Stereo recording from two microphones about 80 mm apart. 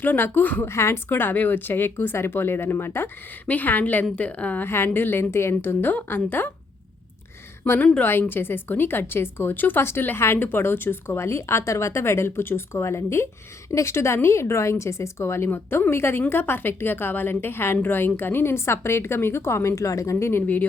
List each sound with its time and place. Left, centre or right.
0.0 s speech: left
0.7 s speech: left
8.2 s a woman's voice: left